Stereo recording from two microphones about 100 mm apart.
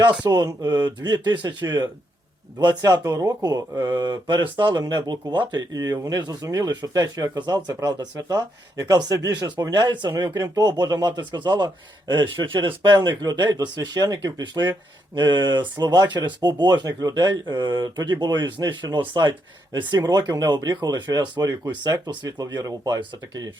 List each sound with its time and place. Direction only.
0.3 s speech: 45° right (ahead or behind)
10.1 s speech: 35° right (ahead or behind)